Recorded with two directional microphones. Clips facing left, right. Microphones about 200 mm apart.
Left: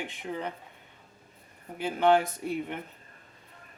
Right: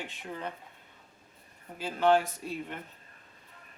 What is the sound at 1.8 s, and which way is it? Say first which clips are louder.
Speech: left 2 dB; 15° left (ahead or behind).